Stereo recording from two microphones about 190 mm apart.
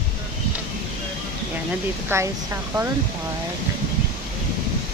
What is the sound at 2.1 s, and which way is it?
Speech, 15° right (ahead or behind).